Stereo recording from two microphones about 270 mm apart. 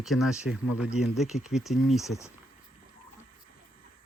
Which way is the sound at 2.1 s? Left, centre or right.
Centre.